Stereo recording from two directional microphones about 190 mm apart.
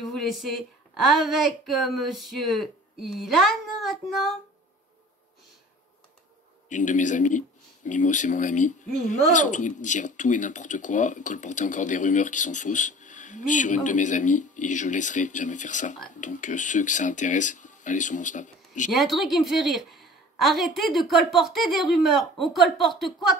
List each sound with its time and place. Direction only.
0.0 s a woman's voice: centre (ahead or behind)
6.7 s speech: 40° left (ahead or behind)
18.9 s a woman's voice: centre (ahead or behind)